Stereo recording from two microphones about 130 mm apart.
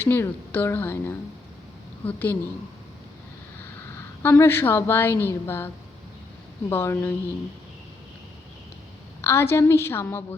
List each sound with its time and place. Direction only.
0.0 s a woman's voice: 15° left (ahead or behind)
3.9 s a woman's voice: 20° left (ahead or behind)
9.2 s a woman's voice: 20° left (ahead or behind)